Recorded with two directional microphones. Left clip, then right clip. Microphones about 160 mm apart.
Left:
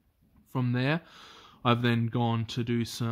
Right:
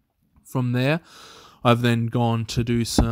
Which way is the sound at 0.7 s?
40° right (ahead or behind).